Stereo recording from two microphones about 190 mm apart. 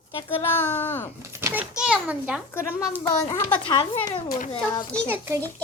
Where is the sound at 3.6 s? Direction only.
25° left (ahead or behind).